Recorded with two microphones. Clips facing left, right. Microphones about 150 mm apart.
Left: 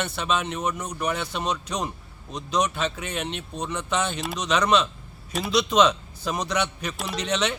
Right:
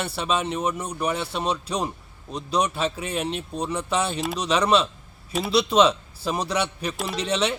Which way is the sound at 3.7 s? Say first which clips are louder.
Right 1 dB; 35° right (ahead or behind).